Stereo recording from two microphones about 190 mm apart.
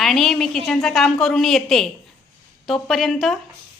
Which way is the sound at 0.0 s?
Centre (ahead or behind).